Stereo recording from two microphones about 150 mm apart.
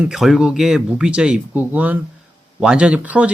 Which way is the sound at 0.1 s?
Centre (ahead or behind).